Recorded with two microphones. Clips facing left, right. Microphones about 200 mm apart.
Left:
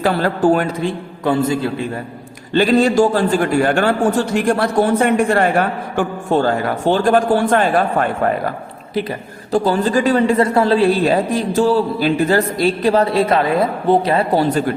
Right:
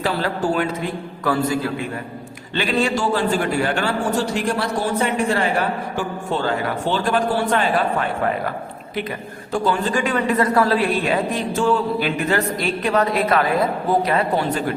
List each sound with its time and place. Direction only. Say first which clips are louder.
0.0 s a man's voice: left 6 dB; 50° left (ahead or behind)
0.8 s a man's voice: left 5 dB; 25° left (ahead or behind)
2.5 s a man's voice: left 7 dB; 40° left (ahead or behind)
9.5 s a man's voice: left 5 dB; 35° left (ahead or behind)